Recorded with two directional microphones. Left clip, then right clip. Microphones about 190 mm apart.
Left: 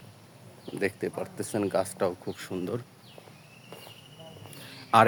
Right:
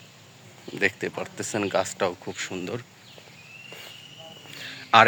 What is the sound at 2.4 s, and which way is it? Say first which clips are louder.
Speech: right 2 dB; 15° left (ahead or behind).